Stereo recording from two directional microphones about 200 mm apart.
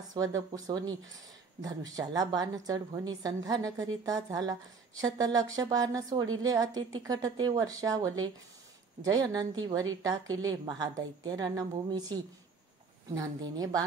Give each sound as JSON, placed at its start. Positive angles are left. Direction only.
{"t": 0.1, "sound": "speech", "side_deg": -15}